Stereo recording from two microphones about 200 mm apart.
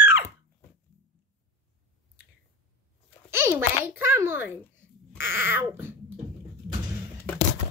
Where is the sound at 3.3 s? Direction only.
15° right (ahead or behind).